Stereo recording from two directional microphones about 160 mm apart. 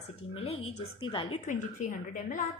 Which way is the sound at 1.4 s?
55° left (ahead or behind).